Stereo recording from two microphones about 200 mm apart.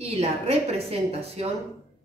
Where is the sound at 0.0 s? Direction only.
30° right (ahead or behind).